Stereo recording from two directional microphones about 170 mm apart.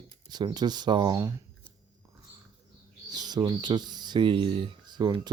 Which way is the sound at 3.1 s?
25° right (ahead or behind).